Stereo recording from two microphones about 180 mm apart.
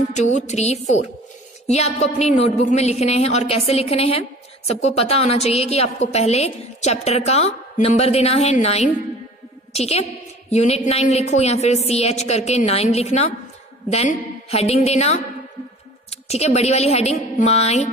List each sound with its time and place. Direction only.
0.1 s a woman's voice: 40° left (ahead or behind)
14.5 s a woman's voice: 35° left (ahead or behind)